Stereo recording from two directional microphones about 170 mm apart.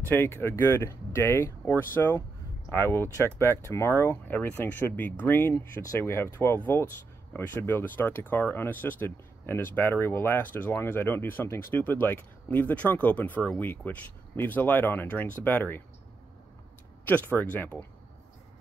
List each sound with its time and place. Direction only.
0.1 s speech: 15° left (ahead or behind)
17.0 s speech: 10° left (ahead or behind)